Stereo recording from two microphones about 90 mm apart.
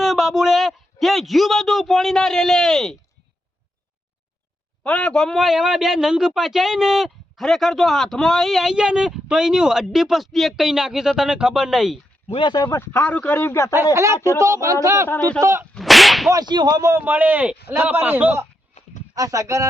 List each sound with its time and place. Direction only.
0.0 s a man's voice: centre (ahead or behind)
4.8 s a man's voice: 15° left (ahead or behind); by 11.9 s 5° right (ahead or behind)
12.3 s speech: 60° left (ahead or behind)
12.7 s a man's voice: 25° left (ahead or behind)
13.9 s speech: 35° right (ahead or behind)
15.7 s whip: centre (ahead or behind)
16.3 s whip: 50° right (ahead or behind)
16.8 s a man's voice: 25° right (ahead or behind)
19.1 s speech: 40° right (ahead or behind)